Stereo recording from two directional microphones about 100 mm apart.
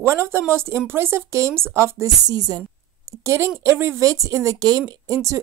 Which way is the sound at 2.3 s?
40° right (ahead or behind).